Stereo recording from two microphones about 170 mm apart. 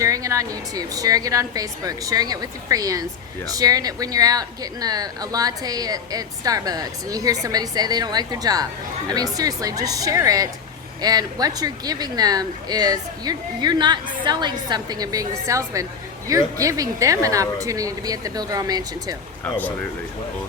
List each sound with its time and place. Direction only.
0.0 s speech: 20° right (ahead or behind)